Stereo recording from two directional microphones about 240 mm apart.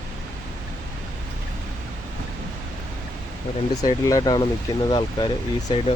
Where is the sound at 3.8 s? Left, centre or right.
Centre.